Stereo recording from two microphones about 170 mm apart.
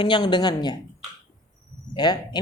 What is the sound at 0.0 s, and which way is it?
Speech, 25° left (ahead or behind).